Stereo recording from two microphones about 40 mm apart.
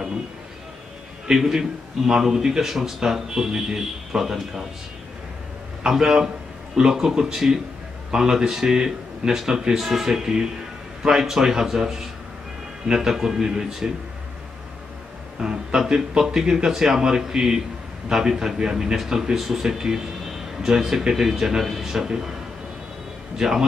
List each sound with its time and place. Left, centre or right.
1.2 s a man's voice: centre
5.9 s a man's voice: centre
15.4 s a man's voice: centre
19.3 s a man's voice: centre
23.3 s a man's voice: centre